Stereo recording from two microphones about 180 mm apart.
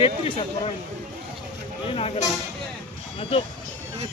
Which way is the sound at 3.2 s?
30° left (ahead or behind).